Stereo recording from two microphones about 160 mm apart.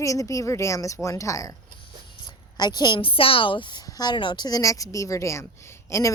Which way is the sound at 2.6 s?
25° left (ahead or behind).